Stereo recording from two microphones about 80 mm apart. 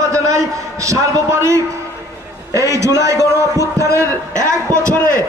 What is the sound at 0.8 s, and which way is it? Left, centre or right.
Speech, right.